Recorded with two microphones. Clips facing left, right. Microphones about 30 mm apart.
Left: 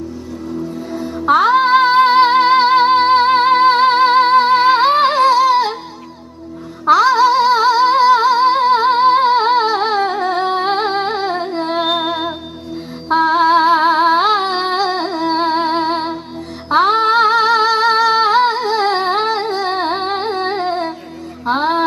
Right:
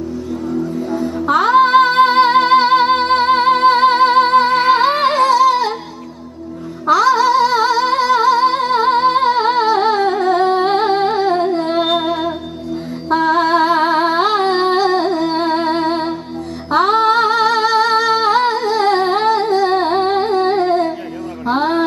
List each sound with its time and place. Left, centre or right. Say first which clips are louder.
0.9 s music: right 4 dB; centre
1.2 s music: left 3 dB; centre
1.5 s music: right 3 dB; centre
6.8 s music: left 1 dB; left
16.6 s female singing: even; centre
18.2 s music: left 1 dB; centre